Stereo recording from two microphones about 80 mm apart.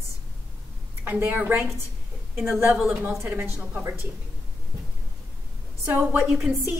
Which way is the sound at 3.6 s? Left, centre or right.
Right.